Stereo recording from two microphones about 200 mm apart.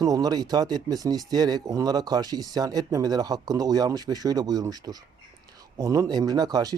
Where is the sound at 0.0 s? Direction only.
20° right (ahead or behind).